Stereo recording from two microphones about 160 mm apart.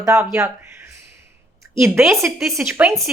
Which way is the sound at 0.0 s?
15° right (ahead or behind).